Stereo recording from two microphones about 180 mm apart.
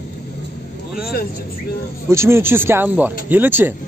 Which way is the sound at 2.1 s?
15° right (ahead or behind).